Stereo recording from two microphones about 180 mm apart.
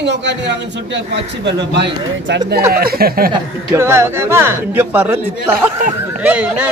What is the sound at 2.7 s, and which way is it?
Speech, 55° right (ahead or behind).